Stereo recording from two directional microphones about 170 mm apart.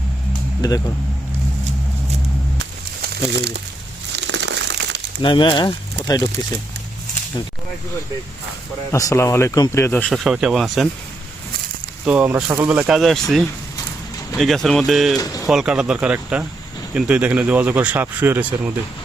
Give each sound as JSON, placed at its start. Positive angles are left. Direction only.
{"t": 0.6, "sound": "speech", "side_deg": 25}
{"t": 2.6, "sound": "crumpling", "side_deg": -80}
{"t": 5.2, "sound": "speech", "side_deg": 30}
{"t": 8.9, "sound": "speech", "side_deg": 20}
{"t": 10.1, "sound": "speech", "side_deg": -5}
{"t": 12.0, "sound": "speech", "side_deg": -10}
{"t": 13.0, "sound": "speech", "side_deg": 0}
{"t": 15.2, "sound": "speech", "side_deg": 20}
{"t": 15.4, "sound": "speech", "side_deg": -5}